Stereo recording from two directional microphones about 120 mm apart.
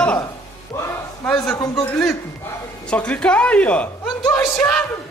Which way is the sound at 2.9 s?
10° left (ahead or behind).